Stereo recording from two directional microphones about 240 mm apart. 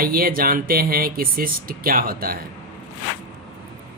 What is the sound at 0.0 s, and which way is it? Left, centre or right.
Speech, right.